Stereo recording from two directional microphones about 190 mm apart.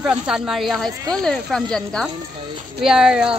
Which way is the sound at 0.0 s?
Centre (ahead or behind).